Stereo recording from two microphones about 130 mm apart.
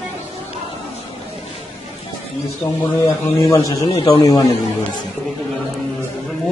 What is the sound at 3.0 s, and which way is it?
A man's voice, 30° left (ahead or behind).